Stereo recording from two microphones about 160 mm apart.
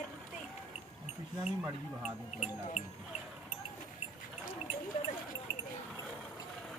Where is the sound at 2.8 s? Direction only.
45° left (ahead or behind).